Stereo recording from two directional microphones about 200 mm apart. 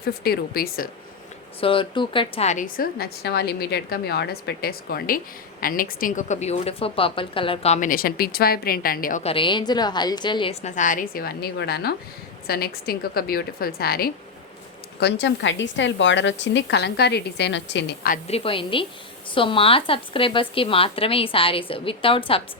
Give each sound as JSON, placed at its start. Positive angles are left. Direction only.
{"t": 0.0, "sound": "a woman's voice", "side_deg": 50}
{"t": 1.6, "sound": "a woman's voice", "side_deg": 25}
{"t": 9.2, "sound": "a woman's voice", "side_deg": 25}
{"t": 14.9, "sound": "a woman's voice", "side_deg": 60}
{"t": 18.3, "sound": "speech", "side_deg": 30}